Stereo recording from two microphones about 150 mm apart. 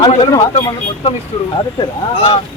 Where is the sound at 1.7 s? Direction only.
35° left (ahead or behind).